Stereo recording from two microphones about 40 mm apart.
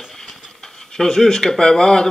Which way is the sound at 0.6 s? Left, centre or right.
Centre.